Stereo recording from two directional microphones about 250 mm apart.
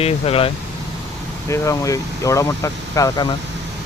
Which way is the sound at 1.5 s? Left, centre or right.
Centre.